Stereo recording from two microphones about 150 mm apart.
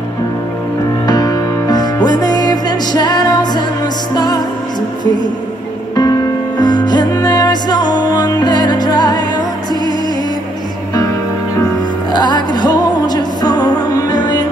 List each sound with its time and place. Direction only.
1.0 s music: 25° left (ahead or behind)
6.6 s music: 30° left (ahead or behind)
12.1 s music: 30° left (ahead or behind)